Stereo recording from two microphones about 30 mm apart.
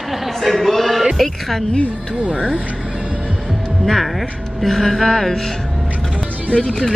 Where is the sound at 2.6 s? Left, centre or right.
Right.